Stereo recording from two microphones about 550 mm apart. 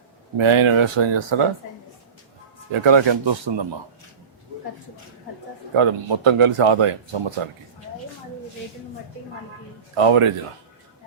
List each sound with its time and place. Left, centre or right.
0.3 s speech: right
2.7 s speech: right
5.7 s speech: right
9.9 s speech: right